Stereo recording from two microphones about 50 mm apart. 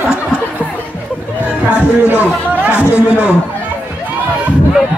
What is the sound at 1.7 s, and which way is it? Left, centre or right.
Speech, right.